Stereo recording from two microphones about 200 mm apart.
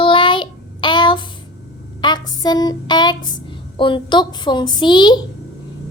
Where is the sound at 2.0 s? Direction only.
20° left (ahead or behind).